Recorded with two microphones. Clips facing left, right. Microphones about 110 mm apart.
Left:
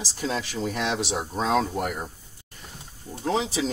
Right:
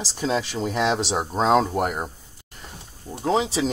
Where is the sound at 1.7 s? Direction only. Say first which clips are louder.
Right 4 dB; 60° right (ahead or behind).